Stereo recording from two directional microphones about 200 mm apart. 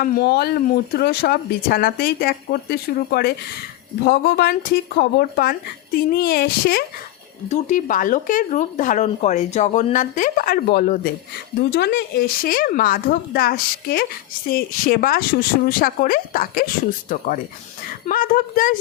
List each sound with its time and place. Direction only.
0.0 s speech: 50° left (ahead or behind)
7.5 s speech: 40° left (ahead or behind)
18.1 s speech: 45° left (ahead or behind)